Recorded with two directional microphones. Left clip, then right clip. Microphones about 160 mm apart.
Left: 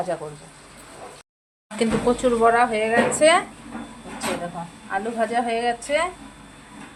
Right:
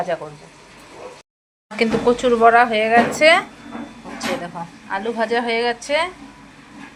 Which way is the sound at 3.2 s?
10° right (ahead or behind).